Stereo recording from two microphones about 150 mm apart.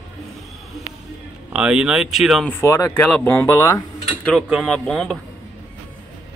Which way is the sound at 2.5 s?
20° left (ahead or behind).